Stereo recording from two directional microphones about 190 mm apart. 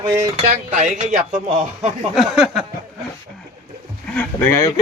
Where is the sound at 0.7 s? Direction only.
40° right (ahead or behind).